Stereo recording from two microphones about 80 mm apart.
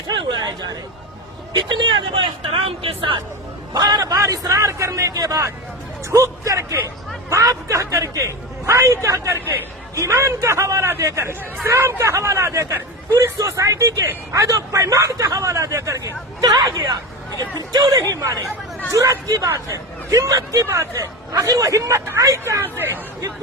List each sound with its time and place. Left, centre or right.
0.1 s a sound: right
1.5 s speech: right
3.7 s speech: right
16.4 s speech: right
18.1 s speech: right
22.7 s speech: right